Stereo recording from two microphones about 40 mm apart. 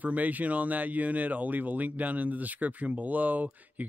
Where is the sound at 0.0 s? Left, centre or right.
Right.